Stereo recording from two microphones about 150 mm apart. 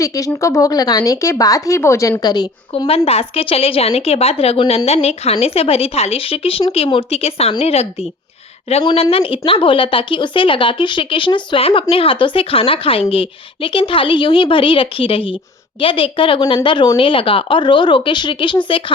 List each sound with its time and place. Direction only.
0.0 s speech: 20° left (ahead or behind)
2.8 s speech: 40° left (ahead or behind)
4.9 s a woman's voice: 45° left (ahead or behind)